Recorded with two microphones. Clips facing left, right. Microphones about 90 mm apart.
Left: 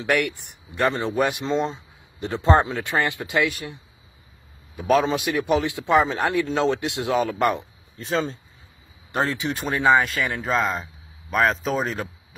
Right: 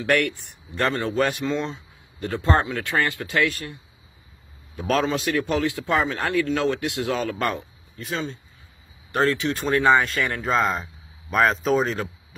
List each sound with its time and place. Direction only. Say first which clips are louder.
0.0 s a man's voice: right 1 dB; 15° left (ahead or behind)
4.7 s a man's voice: left 3 dB; 10° left (ahead or behind)
8.0 s speech: left 4 dB; 35° left (ahead or behind)
9.1 s a man's voice: right 3 dB; 20° left (ahead or behind); by 12.1 s centre (ahead or behind)